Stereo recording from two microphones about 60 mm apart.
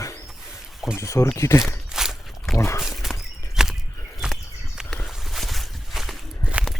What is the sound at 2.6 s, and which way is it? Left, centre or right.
Speech, left.